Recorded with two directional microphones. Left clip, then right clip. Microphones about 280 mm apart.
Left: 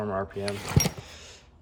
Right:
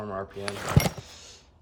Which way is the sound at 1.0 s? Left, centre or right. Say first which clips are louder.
Left 1 dB; centre.